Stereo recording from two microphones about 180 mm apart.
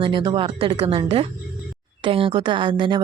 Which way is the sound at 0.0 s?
25° right (ahead or behind).